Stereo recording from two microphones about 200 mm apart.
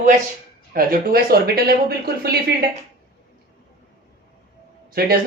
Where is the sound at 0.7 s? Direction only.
45° right (ahead or behind).